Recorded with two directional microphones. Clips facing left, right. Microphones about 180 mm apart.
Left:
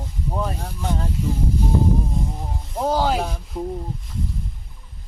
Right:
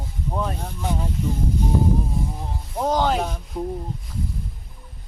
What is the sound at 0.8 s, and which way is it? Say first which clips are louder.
Speech: even; 10° right (ahead or behind).